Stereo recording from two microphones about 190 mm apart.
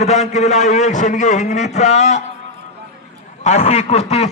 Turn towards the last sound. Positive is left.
turn(degrees=35)  # may be behind; listen again after turning